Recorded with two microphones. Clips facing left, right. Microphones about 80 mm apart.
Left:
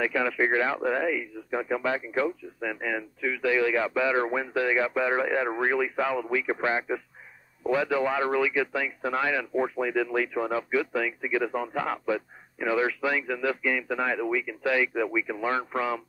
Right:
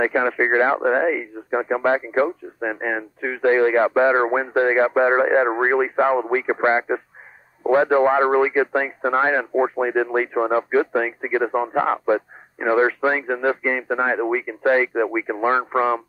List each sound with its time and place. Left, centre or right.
0.0 s speech: right